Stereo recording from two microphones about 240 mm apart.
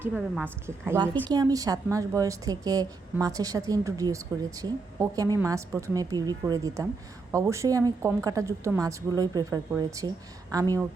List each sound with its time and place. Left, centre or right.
0.1 s a woman's voice: centre
0.9 s a woman's voice: centre